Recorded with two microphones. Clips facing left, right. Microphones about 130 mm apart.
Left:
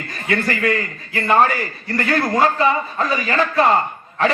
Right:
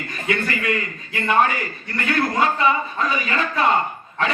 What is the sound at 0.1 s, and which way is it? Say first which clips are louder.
A man's voice: left 3 dB; 40° left (ahead or behind).